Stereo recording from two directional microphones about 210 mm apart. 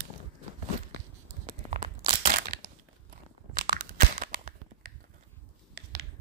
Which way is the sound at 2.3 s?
45° right (ahead or behind).